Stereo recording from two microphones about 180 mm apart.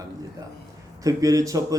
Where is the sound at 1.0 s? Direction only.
20° right (ahead or behind).